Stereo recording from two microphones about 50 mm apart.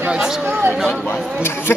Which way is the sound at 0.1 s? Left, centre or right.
Centre.